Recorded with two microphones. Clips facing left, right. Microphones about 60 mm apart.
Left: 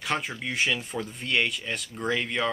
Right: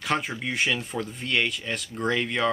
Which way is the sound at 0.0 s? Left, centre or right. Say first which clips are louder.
Right 2 dB; centre.